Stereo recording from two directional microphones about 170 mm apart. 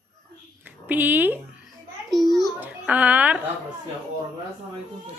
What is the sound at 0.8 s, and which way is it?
Speech, 10° right (ahead or behind).